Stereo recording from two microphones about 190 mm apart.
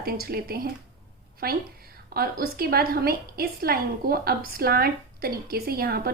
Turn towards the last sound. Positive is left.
turn(degrees=-50)  # may be behind; listen again after turning